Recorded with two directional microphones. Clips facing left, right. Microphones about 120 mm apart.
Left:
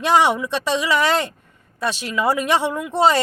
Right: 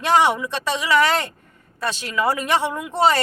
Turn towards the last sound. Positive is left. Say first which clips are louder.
# left 2 dB
turn(degrees=15)  # may be behind; listen again after turning